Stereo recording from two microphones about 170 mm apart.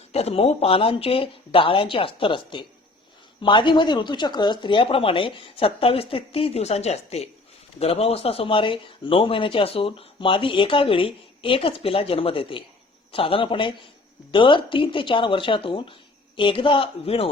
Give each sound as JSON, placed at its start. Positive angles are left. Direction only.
{"t": 0.1, "sound": "speech", "side_deg": 35}